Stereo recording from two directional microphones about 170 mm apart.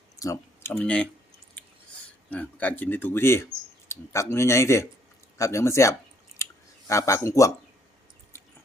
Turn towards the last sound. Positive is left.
turn(degrees=20)  # may be behind; listen again after turning